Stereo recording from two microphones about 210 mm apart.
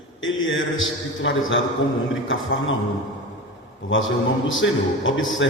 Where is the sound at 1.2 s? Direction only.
60° left (ahead or behind).